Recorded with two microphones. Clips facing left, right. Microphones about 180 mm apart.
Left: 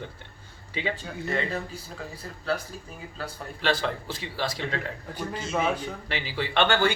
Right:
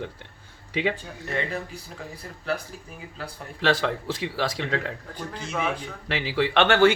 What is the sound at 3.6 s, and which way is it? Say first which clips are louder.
Speech: right 3 dB; 90° right.